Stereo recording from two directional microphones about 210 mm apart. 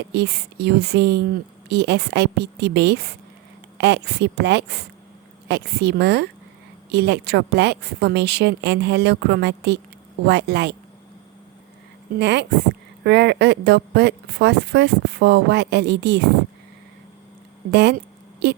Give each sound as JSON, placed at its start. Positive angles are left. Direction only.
{"t": 0.1, "sound": "a woman's voice", "side_deg": -50}
{"t": 12.2, "sound": "speech", "side_deg": -55}
{"t": 17.7, "sound": "a sound", "side_deg": -55}